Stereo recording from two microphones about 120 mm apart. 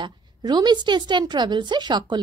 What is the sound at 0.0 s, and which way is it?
A woman's voice, 35° right (ahead or behind).